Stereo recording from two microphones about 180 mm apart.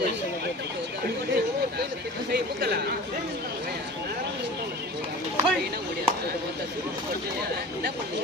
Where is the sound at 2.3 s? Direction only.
60° right (ahead or behind).